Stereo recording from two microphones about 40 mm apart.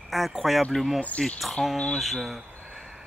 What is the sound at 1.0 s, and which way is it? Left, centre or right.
Speech, left.